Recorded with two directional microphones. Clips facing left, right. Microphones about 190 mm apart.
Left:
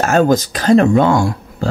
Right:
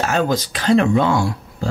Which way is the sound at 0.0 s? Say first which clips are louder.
Left 6 dB; 45° left (ahead or behind).